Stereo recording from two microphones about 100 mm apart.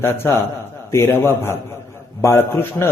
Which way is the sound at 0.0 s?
25° left (ahead or behind).